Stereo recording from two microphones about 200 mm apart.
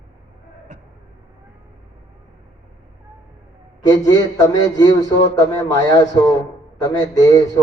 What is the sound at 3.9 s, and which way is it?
A man's voice, 15° left (ahead or behind).